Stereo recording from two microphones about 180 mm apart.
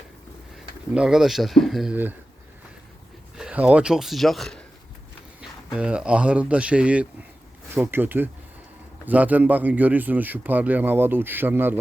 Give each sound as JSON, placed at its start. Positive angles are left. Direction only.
{"t": 0.9, "sound": "speech", "side_deg": -5}
{"t": 3.3, "sound": "speech", "side_deg": -5}
{"t": 5.7, "sound": "a man's voice", "side_deg": -5}